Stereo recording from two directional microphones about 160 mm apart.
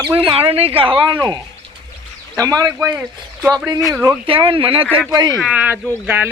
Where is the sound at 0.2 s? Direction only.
35° right (ahead or behind); by 3.0 s 20° right (ahead or behind).